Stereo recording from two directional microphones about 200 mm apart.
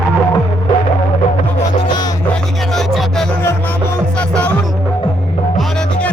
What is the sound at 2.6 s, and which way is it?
Music, centre (ahead or behind).